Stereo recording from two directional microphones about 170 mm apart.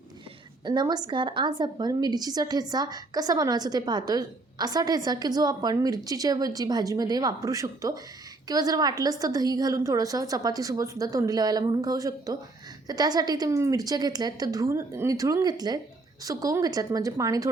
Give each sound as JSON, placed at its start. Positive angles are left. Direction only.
{"t": 0.6, "sound": "a woman's voice", "side_deg": -25}